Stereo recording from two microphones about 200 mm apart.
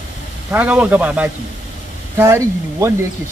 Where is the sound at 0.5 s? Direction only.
5° right (ahead or behind).